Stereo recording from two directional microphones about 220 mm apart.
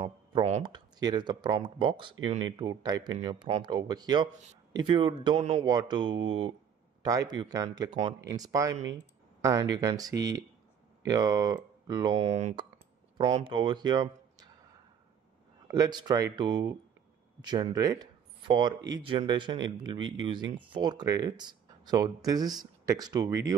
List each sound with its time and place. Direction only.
0.0 s speech: 25° right (ahead or behind)
3.4 s speech: 30° right (ahead or behind)
3.7 s speech: 20° right (ahead or behind)
12.3 s speech: 30° right (ahead or behind)
13.3 s speech: 20° right (ahead or behind)
15.7 s speech: 20° right (ahead or behind)